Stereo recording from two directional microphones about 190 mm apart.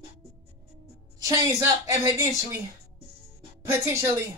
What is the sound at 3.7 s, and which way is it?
Speech, 15° right (ahead or behind).